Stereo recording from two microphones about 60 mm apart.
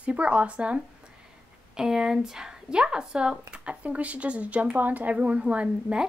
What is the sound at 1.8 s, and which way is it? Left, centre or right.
A woman's voice, centre.